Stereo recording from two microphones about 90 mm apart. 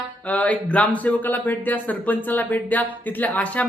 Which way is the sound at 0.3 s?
15° left (ahead or behind).